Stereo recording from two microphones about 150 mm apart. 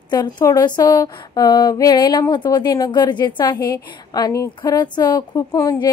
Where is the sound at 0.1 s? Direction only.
25° left (ahead or behind).